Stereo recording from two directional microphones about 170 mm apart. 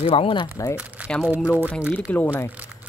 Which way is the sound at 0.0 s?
35° left (ahead or behind).